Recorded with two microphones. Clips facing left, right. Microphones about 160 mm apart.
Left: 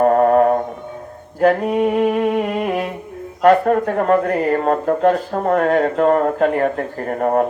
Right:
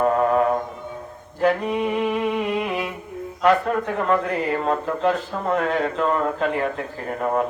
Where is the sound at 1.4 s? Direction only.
55° left (ahead or behind).